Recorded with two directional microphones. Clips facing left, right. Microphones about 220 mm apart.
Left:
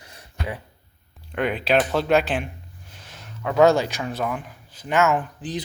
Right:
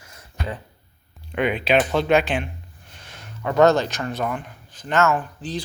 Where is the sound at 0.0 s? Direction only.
15° left (ahead or behind).